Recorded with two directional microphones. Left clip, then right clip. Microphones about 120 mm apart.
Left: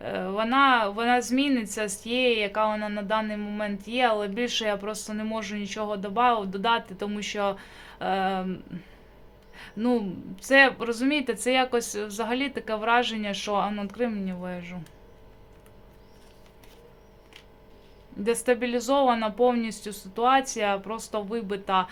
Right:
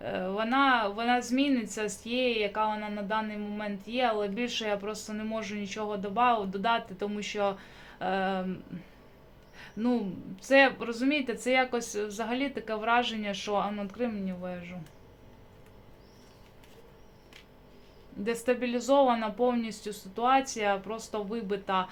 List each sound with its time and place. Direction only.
0.0 s a sound: 30° left (ahead or behind)
0.4 s speech: 35° left (ahead or behind)
18.2 s speech: 35° left (ahead or behind)